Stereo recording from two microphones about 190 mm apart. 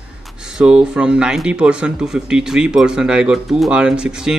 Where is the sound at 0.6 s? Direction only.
5° right (ahead or behind).